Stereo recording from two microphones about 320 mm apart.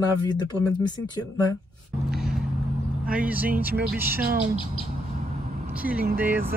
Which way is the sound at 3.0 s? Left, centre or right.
Centre.